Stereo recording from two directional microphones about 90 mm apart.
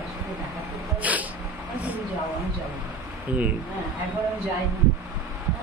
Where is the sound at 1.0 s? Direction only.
15° right (ahead or behind).